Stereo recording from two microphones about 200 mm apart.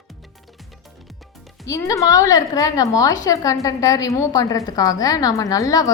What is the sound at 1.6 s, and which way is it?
A woman's voice, 15° left (ahead or behind).